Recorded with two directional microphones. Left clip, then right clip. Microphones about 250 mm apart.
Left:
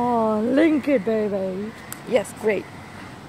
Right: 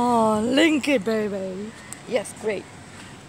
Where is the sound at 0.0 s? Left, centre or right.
Right.